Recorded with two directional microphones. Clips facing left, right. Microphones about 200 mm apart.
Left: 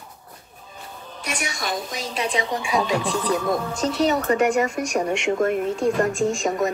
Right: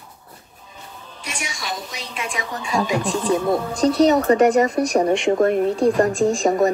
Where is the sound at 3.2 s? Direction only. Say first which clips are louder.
Right 3 dB; 25° right (ahead or behind).